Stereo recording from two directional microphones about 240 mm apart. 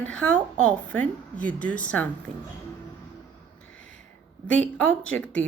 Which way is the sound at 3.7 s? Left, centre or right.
Left.